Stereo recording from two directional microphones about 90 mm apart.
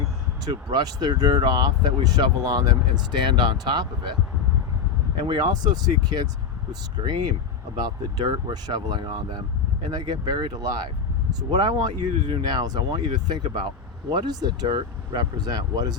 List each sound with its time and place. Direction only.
0.4 s speech: 45° right (ahead or behind)
3.3 s speech: 55° right (ahead or behind)
5.3 s speech: 50° right (ahead or behind)